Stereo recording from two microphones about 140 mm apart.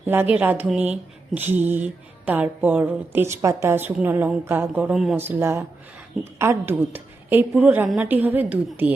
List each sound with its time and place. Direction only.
0.0 s speech: 15° right (ahead or behind)
5.1 s speech: 15° right (ahead or behind)